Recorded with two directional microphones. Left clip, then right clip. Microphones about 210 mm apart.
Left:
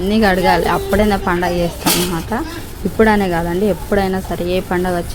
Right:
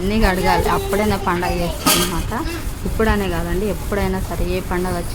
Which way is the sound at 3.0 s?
20° left (ahead or behind).